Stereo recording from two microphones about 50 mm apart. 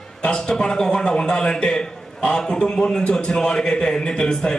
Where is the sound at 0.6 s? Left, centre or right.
Centre.